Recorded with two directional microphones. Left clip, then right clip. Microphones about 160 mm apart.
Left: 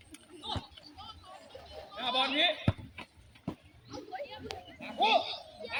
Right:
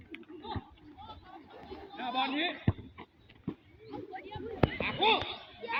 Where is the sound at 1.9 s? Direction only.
90° left.